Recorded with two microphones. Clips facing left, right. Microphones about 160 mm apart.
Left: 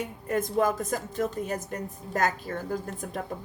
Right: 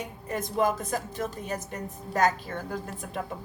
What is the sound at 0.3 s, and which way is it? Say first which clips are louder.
A woman's voice: left 1 dB; 50° left (ahead or behind).